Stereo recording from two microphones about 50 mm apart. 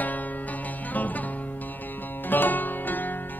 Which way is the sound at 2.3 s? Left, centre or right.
Left.